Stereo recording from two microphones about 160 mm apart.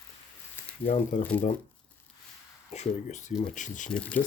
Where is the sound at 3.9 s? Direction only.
5° left (ahead or behind).